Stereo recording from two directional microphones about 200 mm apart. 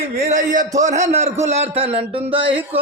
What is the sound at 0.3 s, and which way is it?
A man's voice, 40° right (ahead or behind).